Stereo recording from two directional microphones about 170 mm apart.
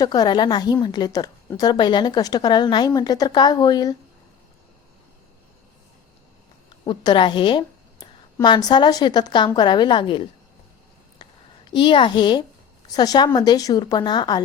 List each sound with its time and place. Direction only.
0.0 s a woman's voice: 25° left (ahead or behind)
6.7 s a woman's voice: 25° left (ahead or behind)
11.2 s a sound: 25° left (ahead or behind)
11.7 s a woman's voice: 30° left (ahead or behind)